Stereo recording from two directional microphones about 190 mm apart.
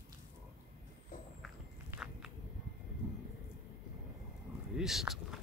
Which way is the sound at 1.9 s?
5° right (ahead or behind).